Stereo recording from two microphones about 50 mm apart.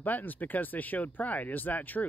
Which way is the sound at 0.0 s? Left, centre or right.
Left.